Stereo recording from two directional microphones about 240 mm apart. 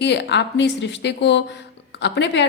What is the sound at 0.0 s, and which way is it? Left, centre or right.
A woman's voice, left.